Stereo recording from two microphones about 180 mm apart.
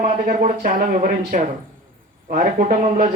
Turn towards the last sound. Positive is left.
turn(degrees=-50)  # may be behind; listen again after turning